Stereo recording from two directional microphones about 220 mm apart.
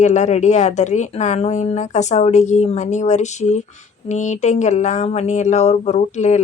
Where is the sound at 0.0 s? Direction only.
30° left (ahead or behind).